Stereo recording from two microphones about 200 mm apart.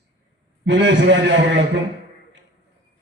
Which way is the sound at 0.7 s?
60° right (ahead or behind).